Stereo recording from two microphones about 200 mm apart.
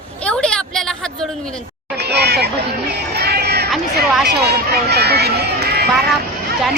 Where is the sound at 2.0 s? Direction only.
55° right (ahead or behind).